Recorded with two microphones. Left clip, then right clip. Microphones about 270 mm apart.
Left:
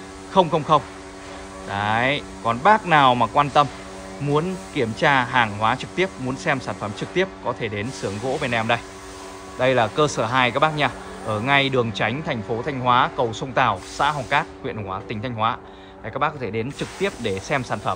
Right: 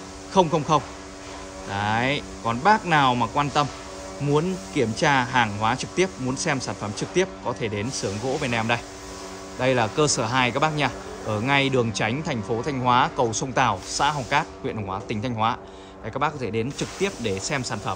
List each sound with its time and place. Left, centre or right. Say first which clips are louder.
0.3 s speech: left 3 dB; centre